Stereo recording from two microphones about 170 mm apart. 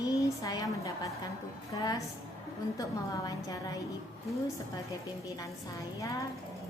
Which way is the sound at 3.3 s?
20° left (ahead or behind).